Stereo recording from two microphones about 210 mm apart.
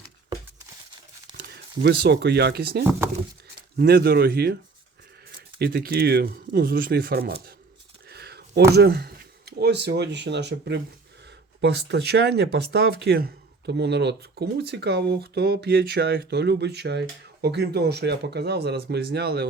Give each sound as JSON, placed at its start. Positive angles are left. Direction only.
{"t": 1.4, "sound": "speech", "side_deg": -50}
{"t": 5.5, "sound": "speech", "side_deg": -50}
{"t": 8.0, "sound": "a sound", "side_deg": -50}
{"t": 8.7, "sound": "speech", "side_deg": -50}